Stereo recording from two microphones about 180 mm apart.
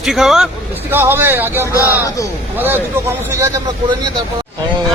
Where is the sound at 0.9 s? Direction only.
10° right (ahead or behind).